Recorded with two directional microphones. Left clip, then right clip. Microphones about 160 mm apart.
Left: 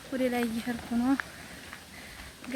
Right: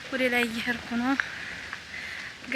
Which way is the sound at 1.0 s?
5° left (ahead or behind).